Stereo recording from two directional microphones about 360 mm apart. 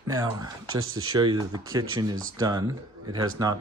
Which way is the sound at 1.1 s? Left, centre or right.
Centre.